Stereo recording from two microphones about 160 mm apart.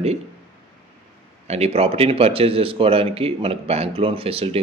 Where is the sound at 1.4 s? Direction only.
40° right (ahead or behind).